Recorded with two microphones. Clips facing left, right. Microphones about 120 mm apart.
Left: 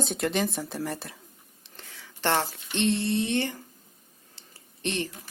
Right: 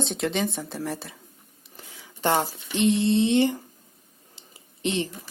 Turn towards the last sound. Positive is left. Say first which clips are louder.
# right 4 dB
turn(degrees=-15)  # may be behind; listen again after turning